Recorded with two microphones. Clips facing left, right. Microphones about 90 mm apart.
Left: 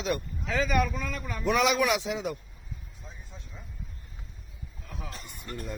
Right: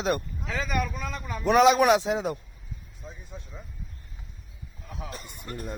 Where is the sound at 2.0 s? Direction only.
50° right (ahead or behind).